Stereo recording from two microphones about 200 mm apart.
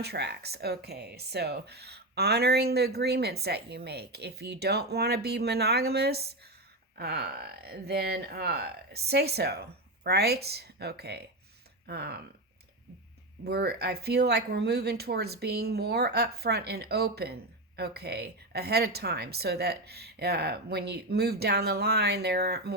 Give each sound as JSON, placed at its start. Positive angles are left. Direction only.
{"t": 0.0, "sound": "speech", "side_deg": -55}
{"t": 13.4, "sound": "speech", "side_deg": -50}